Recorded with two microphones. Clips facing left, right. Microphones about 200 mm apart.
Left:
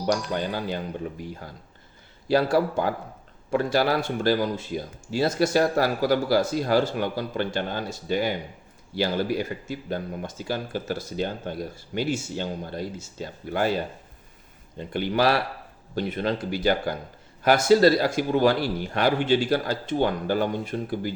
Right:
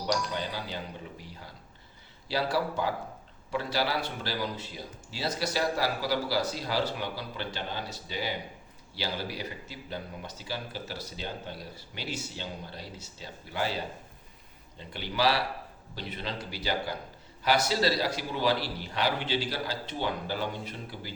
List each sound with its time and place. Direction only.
0.1 s speech: 50° left (ahead or behind)